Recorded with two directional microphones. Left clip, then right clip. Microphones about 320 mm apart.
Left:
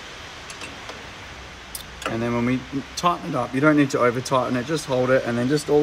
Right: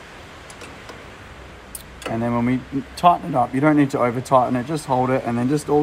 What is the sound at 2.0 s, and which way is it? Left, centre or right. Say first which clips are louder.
Speech: right 2 dB; centre.